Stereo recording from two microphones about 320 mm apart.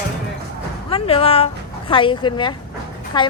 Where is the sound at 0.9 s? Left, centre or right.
Centre.